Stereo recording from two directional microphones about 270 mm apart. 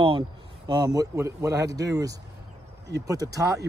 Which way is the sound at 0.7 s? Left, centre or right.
Centre.